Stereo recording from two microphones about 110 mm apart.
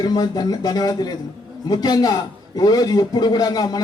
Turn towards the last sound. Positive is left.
turn(degrees=35)  # may be behind; listen again after turning